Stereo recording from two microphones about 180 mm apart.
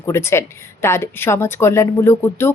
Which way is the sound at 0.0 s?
15° left (ahead or behind).